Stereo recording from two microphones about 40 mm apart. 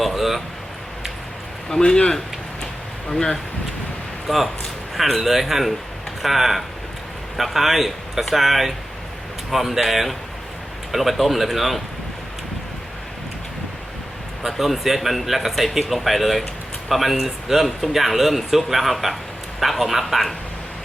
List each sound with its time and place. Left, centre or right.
0.0 s a sound: centre
1.7 s speech: centre
3.1 s speech: centre
4.3 s speech: centre
14.4 s speech: centre